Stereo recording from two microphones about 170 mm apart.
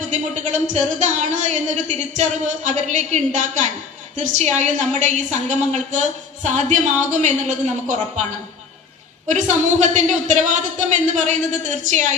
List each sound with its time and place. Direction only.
0.1 s a woman's voice: 45° right (ahead or behind)